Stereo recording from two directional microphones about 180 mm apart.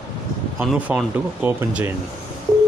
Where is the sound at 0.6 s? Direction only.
Centre (ahead or behind).